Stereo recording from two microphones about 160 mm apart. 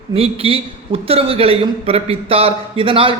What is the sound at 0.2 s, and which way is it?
A man's voice, 35° right (ahead or behind).